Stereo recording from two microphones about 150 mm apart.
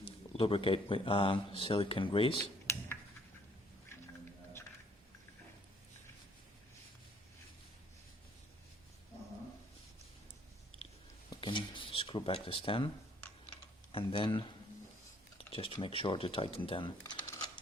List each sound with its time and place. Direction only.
0.0 s speech: 40° left (ahead or behind)
2.7 s tick-tock: 20° left (ahead or behind)
11.3 s a sound: 35° left (ahead or behind)
13.9 s speech: 35° left (ahead or behind)
15.4 s speech: 40° left (ahead or behind)